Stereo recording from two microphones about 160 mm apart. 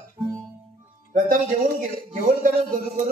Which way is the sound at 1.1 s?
55° right (ahead or behind).